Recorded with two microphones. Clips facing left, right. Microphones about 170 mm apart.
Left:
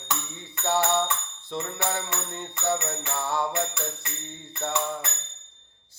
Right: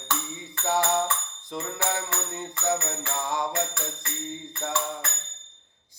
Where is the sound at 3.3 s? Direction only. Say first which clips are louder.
Left 1 dB; 15° right (ahead or behind).